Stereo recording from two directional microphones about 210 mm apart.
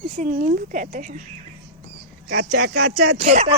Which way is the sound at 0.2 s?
40° right (ahead or behind).